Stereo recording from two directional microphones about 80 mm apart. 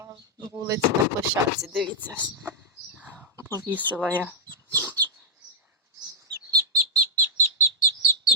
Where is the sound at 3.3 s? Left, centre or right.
Right.